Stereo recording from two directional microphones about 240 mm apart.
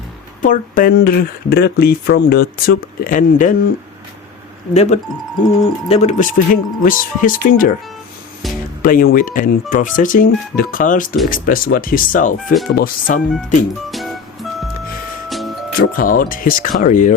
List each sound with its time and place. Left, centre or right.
0.4 s speech: left
4.7 s speech: left
8.8 s speech: left
13.9 s music: centre
15.9 s speech: left